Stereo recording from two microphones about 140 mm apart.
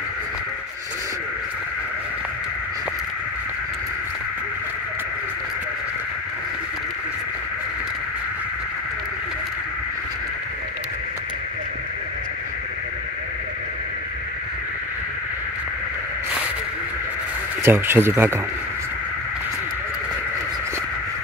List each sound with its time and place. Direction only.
17.6 s speech: 15° right (ahead or behind)